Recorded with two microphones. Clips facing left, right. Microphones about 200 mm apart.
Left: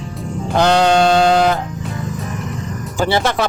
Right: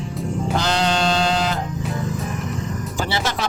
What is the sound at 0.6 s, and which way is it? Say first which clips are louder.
Speech: left 11 dB; 60° left (ahead or behind).